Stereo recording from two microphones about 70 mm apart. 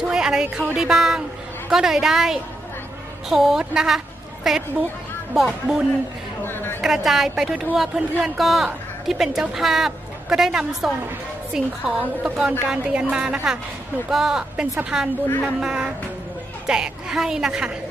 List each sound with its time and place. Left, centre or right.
0.1 s music: centre
0.7 s a woman's voice: centre
6.4 s a sound: left
6.8 s a woman's voice: centre